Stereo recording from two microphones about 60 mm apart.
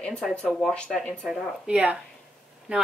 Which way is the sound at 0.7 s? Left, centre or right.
Centre.